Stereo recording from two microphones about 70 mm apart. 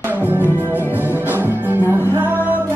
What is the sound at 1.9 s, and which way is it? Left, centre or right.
Music, right.